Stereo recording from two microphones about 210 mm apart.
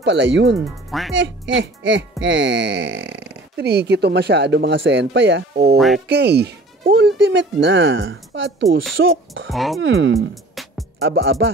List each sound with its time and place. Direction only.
0.0 s speech: 60° right (ahead or behind)
5.8 s speech: centre (ahead or behind)
6.0 s speech: 50° right (ahead or behind)
9.5 s speech: centre (ahead or behind)
9.8 s speech: 60° right (ahead or behind)
10.1 s music: centre (ahead or behind)
11.0 s speech: 65° right (ahead or behind)